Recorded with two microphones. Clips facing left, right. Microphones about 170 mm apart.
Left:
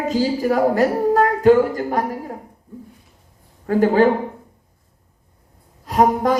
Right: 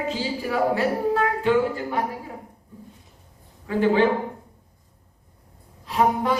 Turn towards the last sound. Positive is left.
turn(degrees=45)  # may be behind; listen again after turning